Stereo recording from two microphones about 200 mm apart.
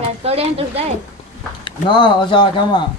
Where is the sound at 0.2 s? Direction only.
30° right (ahead or behind).